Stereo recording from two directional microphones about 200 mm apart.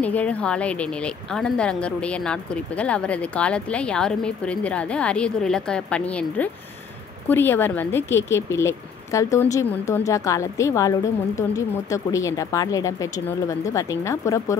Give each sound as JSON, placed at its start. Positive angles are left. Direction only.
{"t": 0.0, "sound": "speech", "side_deg": 5}